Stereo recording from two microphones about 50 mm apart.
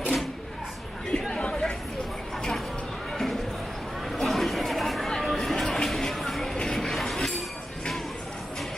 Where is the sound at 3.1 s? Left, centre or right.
Centre.